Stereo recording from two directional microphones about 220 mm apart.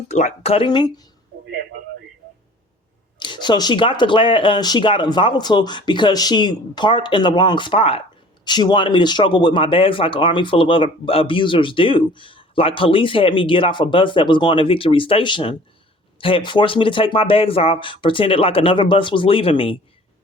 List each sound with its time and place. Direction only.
0.1 s speech: 30° left (ahead or behind)
3.2 s speech: 20° left (ahead or behind)